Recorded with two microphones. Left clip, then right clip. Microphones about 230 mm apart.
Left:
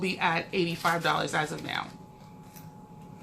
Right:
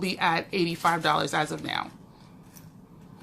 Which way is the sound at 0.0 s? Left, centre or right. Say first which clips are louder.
Right 2 dB; right.